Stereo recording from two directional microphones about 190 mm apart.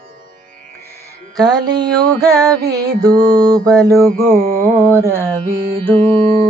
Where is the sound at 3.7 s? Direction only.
15° right (ahead or behind).